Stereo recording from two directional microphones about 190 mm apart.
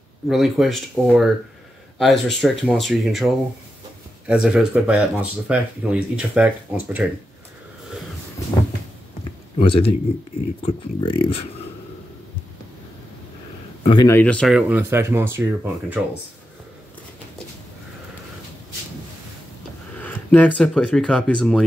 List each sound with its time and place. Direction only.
0.3 s speech: centre (ahead or behind)
4.3 s speech: 5° right (ahead or behind)
9.6 s a man's voice: 30° left (ahead or behind)
13.8 s a man's voice: 20° left (ahead or behind)
14.1 s speech: 5° left (ahead or behind)
14.5 s speech: 10° right (ahead or behind)
20.0 s speech: 10° left (ahead or behind)